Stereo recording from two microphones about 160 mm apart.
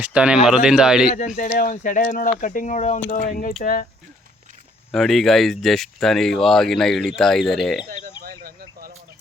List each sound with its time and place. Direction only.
0.0 s speech: 5° right (ahead or behind)
1.4 s speech: 60° left (ahead or behind)
4.9 s speech: centre (ahead or behind)
8.2 s a sound: 70° right (ahead or behind)